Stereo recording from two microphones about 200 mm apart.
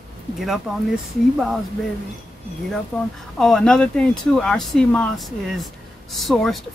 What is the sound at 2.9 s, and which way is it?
Speech, centre (ahead or behind).